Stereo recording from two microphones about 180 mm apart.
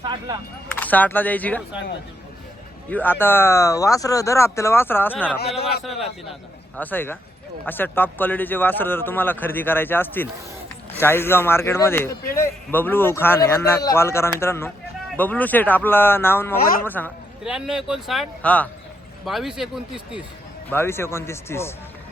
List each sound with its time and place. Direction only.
0.0 s a sound: 25° right (ahead or behind)
0.8 s speech: 10° left (ahead or behind)
2.9 s speech: 10° left (ahead or behind)
5.8 s speech: centre (ahead or behind)
6.7 s speech: 10° left (ahead or behind)
17.4 s speech: 5° right (ahead or behind)
20.7 s speech: 15° left (ahead or behind)